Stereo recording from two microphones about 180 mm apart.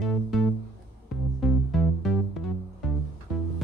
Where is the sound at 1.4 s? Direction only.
Centre (ahead or behind).